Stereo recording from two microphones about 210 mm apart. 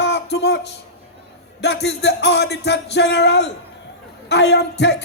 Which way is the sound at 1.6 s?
55° left (ahead or behind).